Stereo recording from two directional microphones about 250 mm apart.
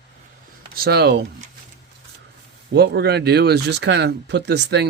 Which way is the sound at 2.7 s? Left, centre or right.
Right.